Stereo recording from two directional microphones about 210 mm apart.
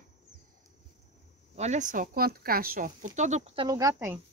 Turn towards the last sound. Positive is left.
turn(degrees=-15)  # may be behind; listen again after turning